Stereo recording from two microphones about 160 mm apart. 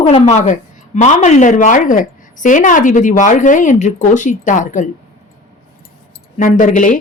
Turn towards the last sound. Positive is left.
turn(degrees=55)  # may be behind; listen again after turning